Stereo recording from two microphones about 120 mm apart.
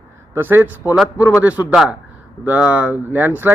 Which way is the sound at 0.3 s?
15° right (ahead or behind).